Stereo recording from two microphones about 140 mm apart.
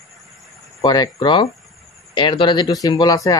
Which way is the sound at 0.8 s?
30° left (ahead or behind).